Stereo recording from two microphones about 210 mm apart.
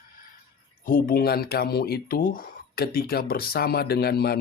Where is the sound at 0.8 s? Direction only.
45° left (ahead or behind).